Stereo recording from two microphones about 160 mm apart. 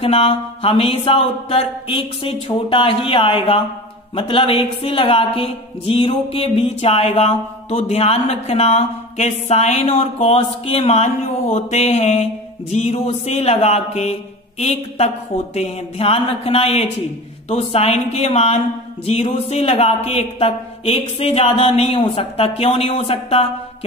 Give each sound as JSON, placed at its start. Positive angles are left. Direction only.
{"t": 0.0, "sound": "a woman's voice", "side_deg": 40}
{"t": 11.5, "sound": "music", "side_deg": 45}
{"t": 15.5, "sound": "a woman's voice", "side_deg": 40}
{"t": 17.5, "sound": "music", "side_deg": 40}
{"t": 19.0, "sound": "a woman's voice", "side_deg": 40}